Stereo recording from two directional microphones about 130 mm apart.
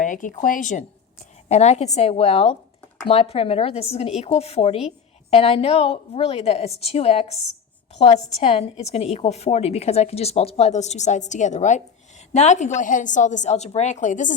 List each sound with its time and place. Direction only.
0.0 s a woman's voice: 85° left
1.5 s a woman's voice: 55° left (ahead or behind); by 14.3 s 75° left (ahead or behind)